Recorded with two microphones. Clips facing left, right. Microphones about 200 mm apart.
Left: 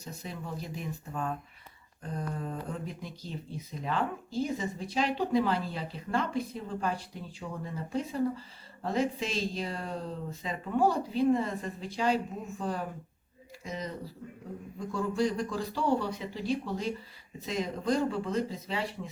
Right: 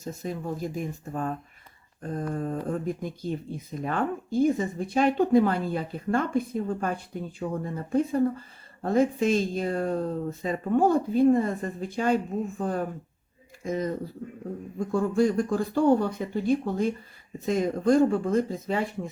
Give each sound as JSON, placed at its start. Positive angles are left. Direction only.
{"t": 0.0, "sound": "speech", "side_deg": -45}